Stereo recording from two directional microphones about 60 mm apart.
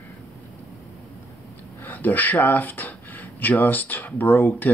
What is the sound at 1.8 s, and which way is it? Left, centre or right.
Speech, left.